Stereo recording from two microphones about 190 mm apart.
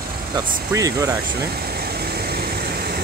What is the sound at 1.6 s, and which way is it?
Vehicle, 55° right (ahead or behind).